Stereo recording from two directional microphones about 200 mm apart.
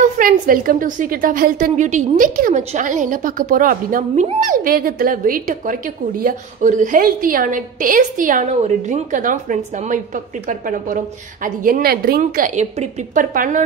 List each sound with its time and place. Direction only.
0.0 s a woman's voice: 45° right (ahead or behind)